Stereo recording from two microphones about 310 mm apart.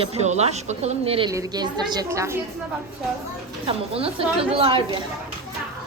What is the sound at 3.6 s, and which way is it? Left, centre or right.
A woman's voice, centre.